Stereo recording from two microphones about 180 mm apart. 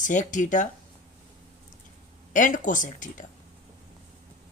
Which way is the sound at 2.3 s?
45° left (ahead or behind).